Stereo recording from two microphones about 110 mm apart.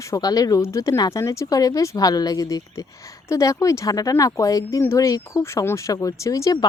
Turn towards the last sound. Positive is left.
turn(degrees=30)  # may be behind; listen again after turning